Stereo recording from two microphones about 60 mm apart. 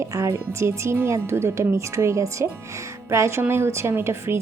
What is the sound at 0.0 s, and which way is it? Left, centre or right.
A woman's voice, right.